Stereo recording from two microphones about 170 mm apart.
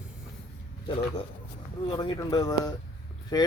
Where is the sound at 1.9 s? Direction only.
25° left (ahead or behind).